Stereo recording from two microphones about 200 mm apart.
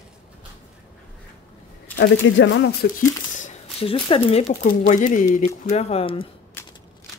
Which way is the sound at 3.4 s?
25° left (ahead or behind).